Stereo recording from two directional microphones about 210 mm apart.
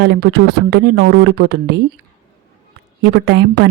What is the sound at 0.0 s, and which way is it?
Speech, 50° right (ahead or behind).